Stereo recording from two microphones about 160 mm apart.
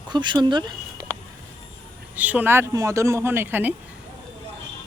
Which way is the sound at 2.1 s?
10° right (ahead or behind).